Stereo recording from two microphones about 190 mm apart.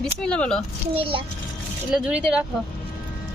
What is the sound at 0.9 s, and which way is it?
Speech, 30° right (ahead or behind).